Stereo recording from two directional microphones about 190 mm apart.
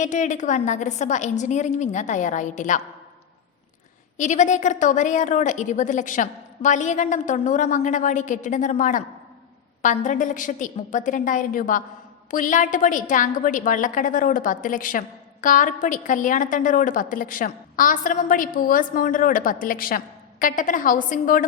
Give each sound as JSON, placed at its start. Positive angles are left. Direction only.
{"t": 0.0, "sound": "a woman's voice", "side_deg": 40}
{"t": 4.2, "sound": "a woman's voice", "side_deg": 40}